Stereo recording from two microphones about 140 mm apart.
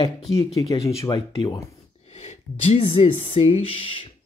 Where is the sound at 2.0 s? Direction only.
50° left (ahead or behind).